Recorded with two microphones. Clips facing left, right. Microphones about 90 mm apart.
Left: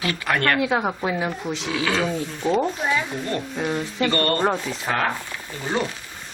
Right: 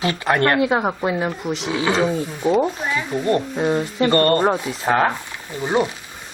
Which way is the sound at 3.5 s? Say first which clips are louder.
Right 5 dB; 20° right (ahead or behind).